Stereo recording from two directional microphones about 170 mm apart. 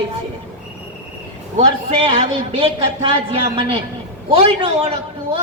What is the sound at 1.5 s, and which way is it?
A woman's voice, 35° right (ahead or behind).